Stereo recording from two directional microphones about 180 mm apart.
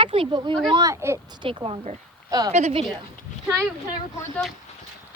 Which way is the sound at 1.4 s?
30° right (ahead or behind).